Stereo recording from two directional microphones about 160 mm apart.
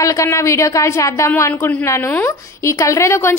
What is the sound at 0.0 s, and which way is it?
A woman's voice, 20° left (ahead or behind).